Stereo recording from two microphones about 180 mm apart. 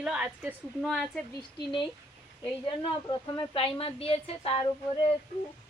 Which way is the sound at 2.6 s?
25° left (ahead or behind).